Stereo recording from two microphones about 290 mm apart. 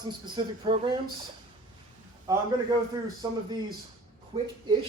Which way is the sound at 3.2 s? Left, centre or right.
Centre.